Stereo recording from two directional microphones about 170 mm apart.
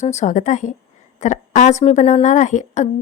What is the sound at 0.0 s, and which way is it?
A woman's voice, 45° left (ahead or behind).